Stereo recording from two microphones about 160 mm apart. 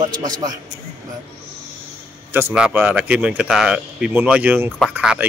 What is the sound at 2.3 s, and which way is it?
Speech, 10° right (ahead or behind).